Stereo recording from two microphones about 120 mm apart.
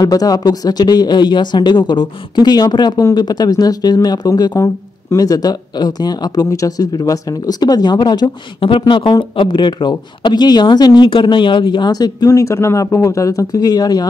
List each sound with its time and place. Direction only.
0.0 s speech: 30° left (ahead or behind)